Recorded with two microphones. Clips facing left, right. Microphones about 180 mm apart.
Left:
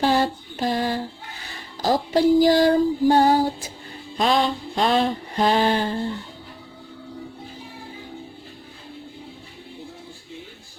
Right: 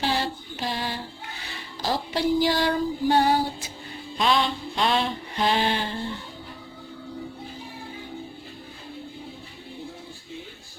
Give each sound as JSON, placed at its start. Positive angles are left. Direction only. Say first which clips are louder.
{"t": 0.0, "sound": "a sound", "louder": "left 6 dB", "side_deg": 50}
{"t": 1.5, "sound": "music", "louder": "left 6 dB", "side_deg": 45}
{"t": 4.2, "sound": "mantra", "louder": "left 3 dB", "side_deg": 40}